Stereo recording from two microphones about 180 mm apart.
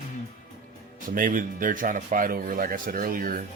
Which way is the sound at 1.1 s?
50° right (ahead or behind).